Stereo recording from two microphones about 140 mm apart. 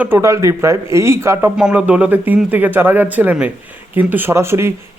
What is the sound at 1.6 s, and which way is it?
A man's voice, 10° right (ahead or behind).